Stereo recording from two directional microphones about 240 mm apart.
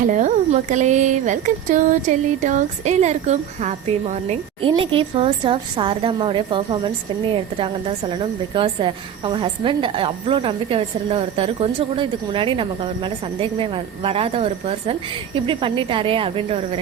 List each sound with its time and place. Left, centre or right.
0.1 s a woman's voice: right